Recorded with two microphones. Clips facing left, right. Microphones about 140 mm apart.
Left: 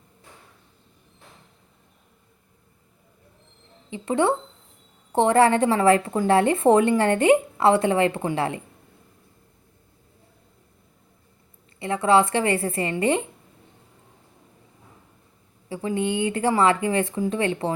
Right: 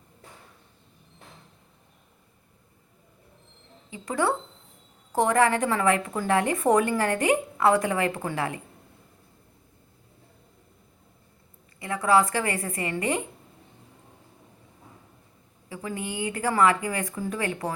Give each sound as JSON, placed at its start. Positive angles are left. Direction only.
{"t": 3.8, "sound": "a woman's voice", "side_deg": 25}
{"t": 11.8, "sound": "a woman's voice", "side_deg": 25}
{"t": 15.7, "sound": "a woman's voice", "side_deg": 25}